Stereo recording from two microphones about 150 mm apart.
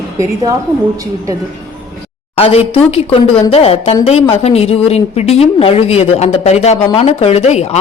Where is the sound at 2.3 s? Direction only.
40° left (ahead or behind).